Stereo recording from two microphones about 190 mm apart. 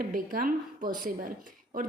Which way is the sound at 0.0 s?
50° right (ahead or behind).